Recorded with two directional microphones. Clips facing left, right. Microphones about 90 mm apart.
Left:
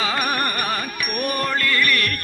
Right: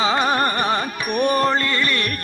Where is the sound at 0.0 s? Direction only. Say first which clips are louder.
Right 4 dB; 25° right (ahead or behind).